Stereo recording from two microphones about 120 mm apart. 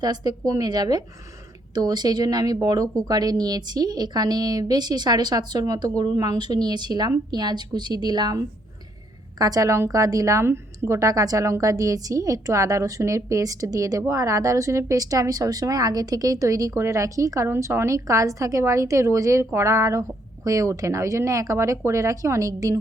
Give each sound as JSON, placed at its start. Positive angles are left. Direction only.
{"t": 0.0, "sound": "speech", "side_deg": -35}
{"t": 9.4, "sound": "speech", "side_deg": -30}